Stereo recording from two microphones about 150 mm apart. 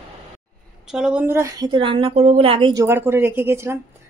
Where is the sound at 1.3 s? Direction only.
20° right (ahead or behind); by 2.7 s 35° right (ahead or behind).